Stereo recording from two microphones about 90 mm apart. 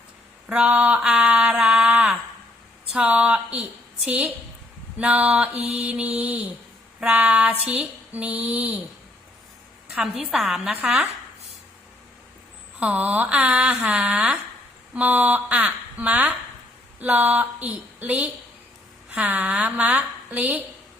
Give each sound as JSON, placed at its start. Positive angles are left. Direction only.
{"t": 0.4, "sound": "a sound", "side_deg": -10}
{"t": 0.7, "sound": "speech", "side_deg": -15}
{"t": 1.2, "sound": "a sound", "side_deg": -15}
{"t": 2.9, "sound": "a woman's voice", "side_deg": -10}
{"t": 9.9, "sound": "a woman's voice", "side_deg": -5}
{"t": 12.8, "sound": "speech", "side_deg": -15}
{"t": 19.7, "sound": "speech", "side_deg": -15}